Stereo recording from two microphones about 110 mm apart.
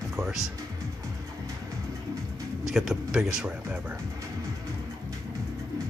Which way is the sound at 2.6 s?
Centre (ahead or behind).